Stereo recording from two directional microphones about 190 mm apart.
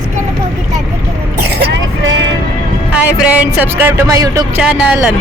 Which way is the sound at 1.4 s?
60° right (ahead or behind).